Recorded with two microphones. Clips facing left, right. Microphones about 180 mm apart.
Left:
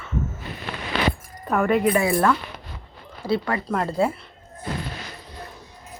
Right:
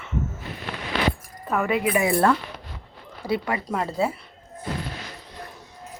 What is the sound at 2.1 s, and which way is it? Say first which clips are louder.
Speech: even; 30° right (ahead or behind).